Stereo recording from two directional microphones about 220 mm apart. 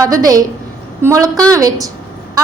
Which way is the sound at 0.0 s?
15° right (ahead or behind).